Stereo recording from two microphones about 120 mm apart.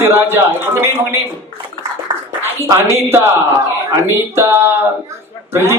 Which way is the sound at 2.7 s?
20° right (ahead or behind).